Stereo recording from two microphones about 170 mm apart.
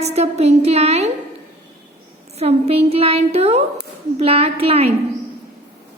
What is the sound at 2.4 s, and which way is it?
A woman's voice, 40° right (ahead or behind).